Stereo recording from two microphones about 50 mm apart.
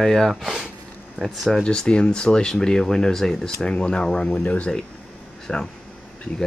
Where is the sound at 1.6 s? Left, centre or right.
Centre.